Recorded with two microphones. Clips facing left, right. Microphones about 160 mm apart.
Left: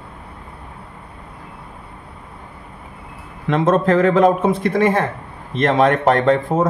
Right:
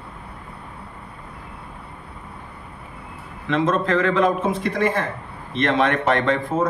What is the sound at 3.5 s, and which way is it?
A man's voice, 45° left (ahead or behind).